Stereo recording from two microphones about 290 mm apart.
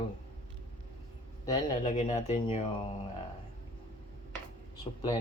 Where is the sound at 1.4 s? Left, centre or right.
Left.